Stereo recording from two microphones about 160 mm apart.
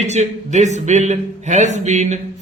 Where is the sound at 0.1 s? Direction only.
45° right (ahead or behind).